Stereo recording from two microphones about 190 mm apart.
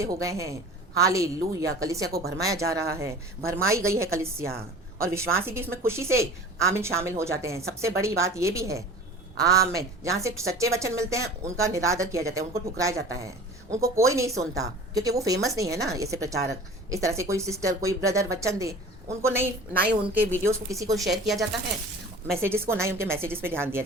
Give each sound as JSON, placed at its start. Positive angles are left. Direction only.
{"t": 0.0, "sound": "speech", "side_deg": -15}
{"t": 21.0, "sound": "speech", "side_deg": 0}
{"t": 22.4, "sound": "speech", "side_deg": -10}